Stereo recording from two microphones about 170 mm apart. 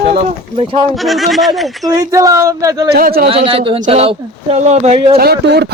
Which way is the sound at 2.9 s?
60° right (ahead or behind).